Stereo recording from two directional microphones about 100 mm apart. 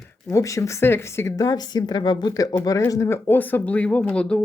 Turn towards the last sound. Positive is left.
turn(degrees=10)  # may be behind; listen again after turning